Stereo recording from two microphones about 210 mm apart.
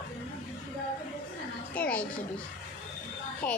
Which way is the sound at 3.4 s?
5° left (ahead or behind).